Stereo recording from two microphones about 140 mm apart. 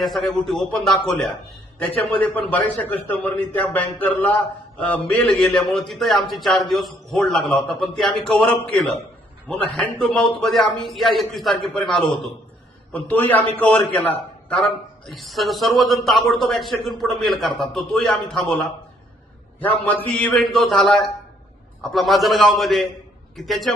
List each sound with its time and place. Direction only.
0.0 s a man's voice: centre (ahead or behind)